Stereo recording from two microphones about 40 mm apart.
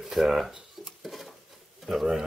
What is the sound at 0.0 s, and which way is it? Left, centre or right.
Dishes, centre.